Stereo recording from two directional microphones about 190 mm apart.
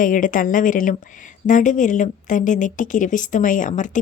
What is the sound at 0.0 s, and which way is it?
A woman's voice, 45° left (ahead or behind).